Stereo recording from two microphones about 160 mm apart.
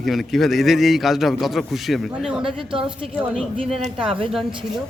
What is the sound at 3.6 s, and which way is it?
Speech, 40° right (ahead or behind).